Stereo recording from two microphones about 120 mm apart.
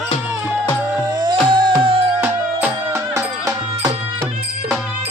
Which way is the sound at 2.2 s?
15° right (ahead or behind).